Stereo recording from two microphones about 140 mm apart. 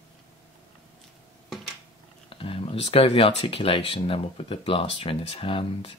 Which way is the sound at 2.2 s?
40° left (ahead or behind).